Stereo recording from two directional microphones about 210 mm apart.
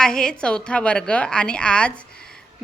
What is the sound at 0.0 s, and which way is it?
A woman's voice, 5° left (ahead or behind).